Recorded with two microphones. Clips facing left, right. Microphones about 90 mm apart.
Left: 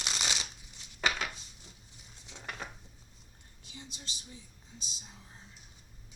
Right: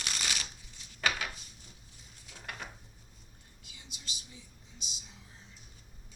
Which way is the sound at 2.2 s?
20° left (ahead or behind).